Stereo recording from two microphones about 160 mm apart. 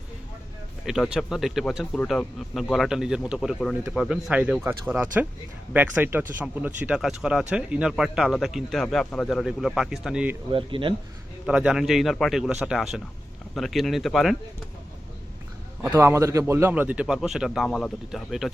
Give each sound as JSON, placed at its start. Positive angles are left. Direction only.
{"t": 0.9, "sound": "speech", "side_deg": -5}
{"t": 10.5, "sound": "speech", "side_deg": -30}
{"t": 11.4, "sound": "speech", "side_deg": -5}
{"t": 15.8, "sound": "a man's voice", "side_deg": -15}